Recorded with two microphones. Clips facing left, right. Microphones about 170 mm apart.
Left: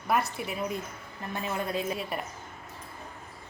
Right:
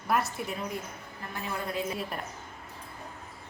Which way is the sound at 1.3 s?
20° left (ahead or behind).